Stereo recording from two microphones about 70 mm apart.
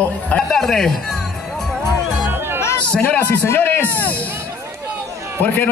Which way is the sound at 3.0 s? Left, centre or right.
Left.